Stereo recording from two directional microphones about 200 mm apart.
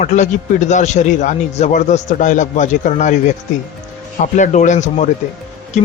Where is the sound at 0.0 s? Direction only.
35° left (ahead or behind).